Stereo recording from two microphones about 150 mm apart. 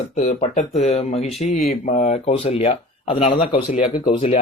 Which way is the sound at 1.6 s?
60° left (ahead or behind).